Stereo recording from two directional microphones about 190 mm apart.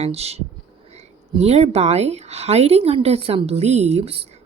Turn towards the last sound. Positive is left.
turn(degrees=-30)  # may be behind; listen again after turning